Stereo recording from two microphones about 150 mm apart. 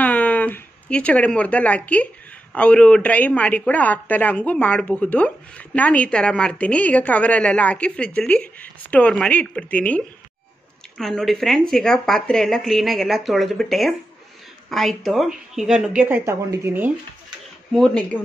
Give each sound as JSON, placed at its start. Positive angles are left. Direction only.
{"t": 0.0, "sound": "a sound", "side_deg": 10}
{"t": 2.5, "sound": "speech", "side_deg": 10}
{"t": 17.7, "sound": "speech", "side_deg": 0}